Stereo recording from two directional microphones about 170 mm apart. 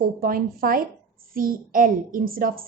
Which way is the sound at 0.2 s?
55° right (ahead or behind).